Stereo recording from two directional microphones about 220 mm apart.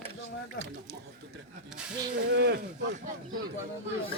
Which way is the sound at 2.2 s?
50° right (ahead or behind).